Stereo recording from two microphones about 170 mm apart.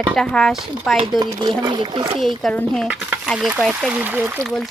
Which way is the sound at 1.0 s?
30° right (ahead or behind).